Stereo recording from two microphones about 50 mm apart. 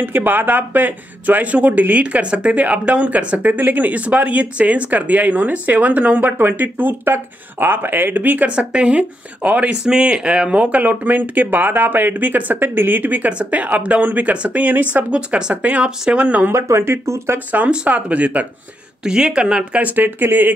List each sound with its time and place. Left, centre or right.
0.0 s speech: right
6.3 s speech: right
8.5 s speech: right
13.3 s speech: right
16.5 s speech: right
17.6 s speech: right
19.0 s speech: centre; by 20.5 s right